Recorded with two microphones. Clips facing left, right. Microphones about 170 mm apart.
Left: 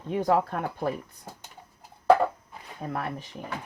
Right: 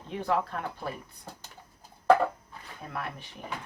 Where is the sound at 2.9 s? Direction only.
40° left (ahead or behind).